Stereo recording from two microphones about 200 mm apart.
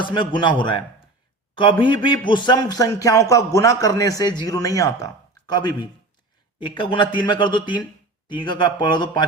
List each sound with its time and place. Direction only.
0.0 s speech: 25° left (ahead or behind)
1.8 s a man's voice: 25° left (ahead or behind)